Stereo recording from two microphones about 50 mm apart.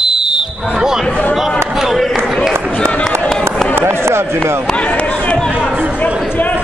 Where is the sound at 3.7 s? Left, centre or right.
Right.